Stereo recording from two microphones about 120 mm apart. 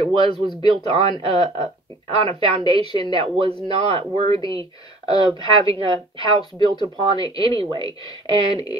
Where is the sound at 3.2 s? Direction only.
50° right (ahead or behind).